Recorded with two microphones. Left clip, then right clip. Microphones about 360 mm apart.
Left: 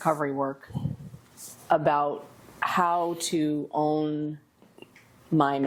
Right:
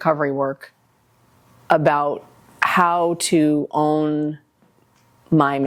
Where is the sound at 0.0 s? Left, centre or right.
Right.